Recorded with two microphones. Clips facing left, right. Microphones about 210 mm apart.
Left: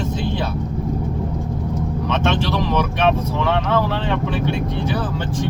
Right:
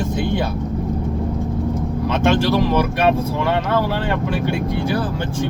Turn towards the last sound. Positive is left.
turn(degrees=-10)  # may be behind; listen again after turning